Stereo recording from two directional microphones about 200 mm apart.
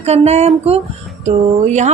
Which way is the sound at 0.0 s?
30° right (ahead or behind).